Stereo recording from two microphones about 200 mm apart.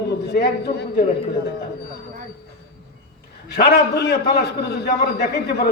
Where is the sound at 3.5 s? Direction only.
55° left (ahead or behind).